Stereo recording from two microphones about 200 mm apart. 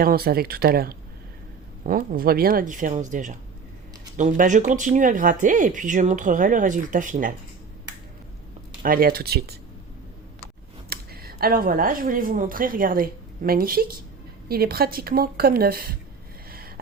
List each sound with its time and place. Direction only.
0.0 s speech: 50° right (ahead or behind)
8.8 s speech: 45° right (ahead or behind)
10.8 s speech: 50° right (ahead or behind)
16.5 s a sound: 50° right (ahead or behind)